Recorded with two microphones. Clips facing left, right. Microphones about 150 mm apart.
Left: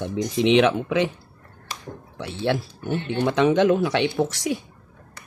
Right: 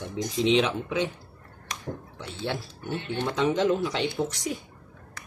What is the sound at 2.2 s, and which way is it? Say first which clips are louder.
Speech: left 9 dB; 70° left (ahead or behind).